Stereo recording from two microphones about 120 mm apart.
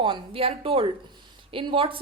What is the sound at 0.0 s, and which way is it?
A woman's voice, 50° right (ahead or behind).